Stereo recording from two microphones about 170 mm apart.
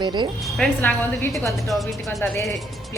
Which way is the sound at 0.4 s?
5° left (ahead or behind).